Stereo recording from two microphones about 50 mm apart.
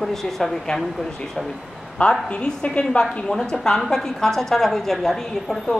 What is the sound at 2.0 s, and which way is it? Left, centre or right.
A woman's voice, left.